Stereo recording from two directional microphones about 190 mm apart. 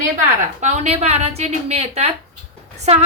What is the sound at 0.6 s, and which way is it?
A woman's voice, 35° right (ahead or behind).